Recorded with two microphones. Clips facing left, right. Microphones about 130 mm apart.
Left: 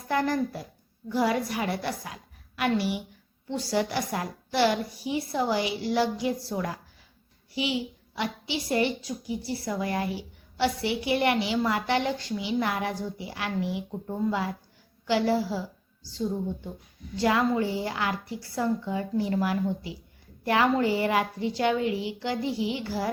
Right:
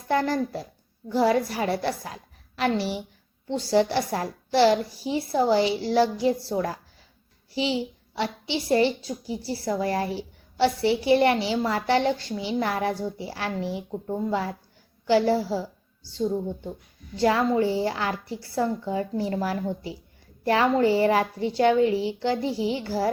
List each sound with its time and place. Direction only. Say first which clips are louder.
0.1 s a woman's voice: right 2 dB; 30° right (ahead or behind)
17.2 s a child's voice: right 3 dB; 30° right (ahead or behind)